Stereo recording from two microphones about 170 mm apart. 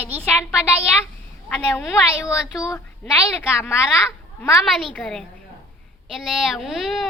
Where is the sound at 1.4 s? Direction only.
15° left (ahead or behind).